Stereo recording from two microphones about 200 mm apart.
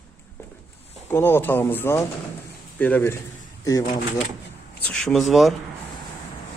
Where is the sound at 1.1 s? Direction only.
10° left (ahead or behind).